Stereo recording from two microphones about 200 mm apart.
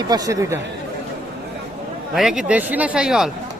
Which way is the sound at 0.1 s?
15° right (ahead or behind).